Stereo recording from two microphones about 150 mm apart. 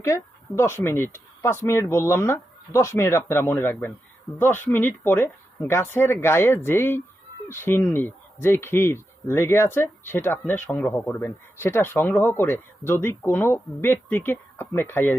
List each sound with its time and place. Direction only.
0.0 s speech: 20° left (ahead or behind)